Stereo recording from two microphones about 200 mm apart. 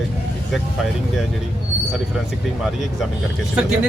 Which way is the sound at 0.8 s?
Centre (ahead or behind).